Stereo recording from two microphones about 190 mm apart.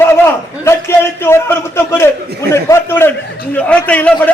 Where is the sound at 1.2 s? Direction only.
15° left (ahead or behind).